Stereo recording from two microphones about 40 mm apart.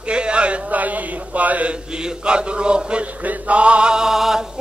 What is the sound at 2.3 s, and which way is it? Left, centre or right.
Mantra, right.